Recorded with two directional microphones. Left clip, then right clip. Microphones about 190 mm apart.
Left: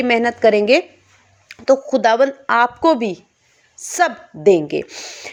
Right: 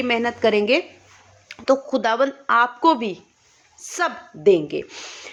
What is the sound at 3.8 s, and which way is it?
A woman's voice, 25° left (ahead or behind).